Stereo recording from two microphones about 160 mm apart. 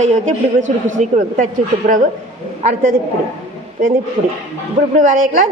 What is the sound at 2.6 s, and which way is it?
Speech, 55° right (ahead or behind).